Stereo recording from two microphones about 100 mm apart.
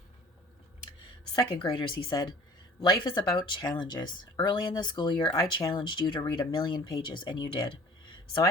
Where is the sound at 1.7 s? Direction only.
50° left (ahead or behind).